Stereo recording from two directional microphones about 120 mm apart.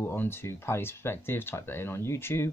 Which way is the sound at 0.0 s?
15° left (ahead or behind).